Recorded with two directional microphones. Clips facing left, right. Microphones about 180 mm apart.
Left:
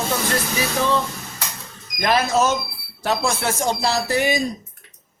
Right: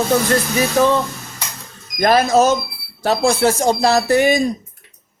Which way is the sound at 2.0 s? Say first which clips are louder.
Right 6 dB; 40° right (ahead or behind).